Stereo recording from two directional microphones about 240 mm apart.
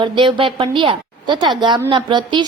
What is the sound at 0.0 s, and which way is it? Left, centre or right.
A woman's voice, right.